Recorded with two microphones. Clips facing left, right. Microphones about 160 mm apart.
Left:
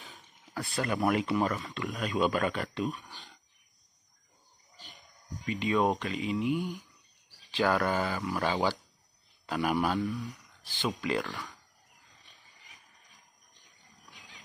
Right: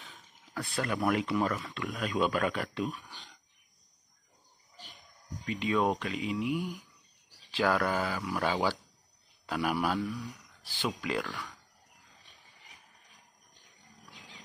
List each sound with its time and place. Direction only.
0.0 s speech: 5° left (ahead or behind)
5.4 s speech: centre (ahead or behind)